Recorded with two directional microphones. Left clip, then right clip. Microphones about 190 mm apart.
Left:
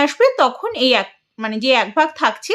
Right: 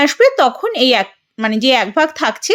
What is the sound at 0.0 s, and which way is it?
Speech, 25° right (ahead or behind).